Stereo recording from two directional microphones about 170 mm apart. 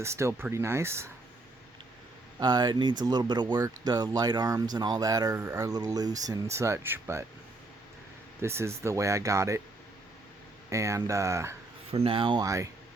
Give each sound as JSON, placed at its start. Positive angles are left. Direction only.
{"t": 0.0, "sound": "speech", "side_deg": -15}
{"t": 2.4, "sound": "speech", "side_deg": -25}
{"t": 8.4, "sound": "speech", "side_deg": -15}
{"t": 10.7, "sound": "speech", "side_deg": -20}
{"t": 11.9, "sound": "speech", "side_deg": -35}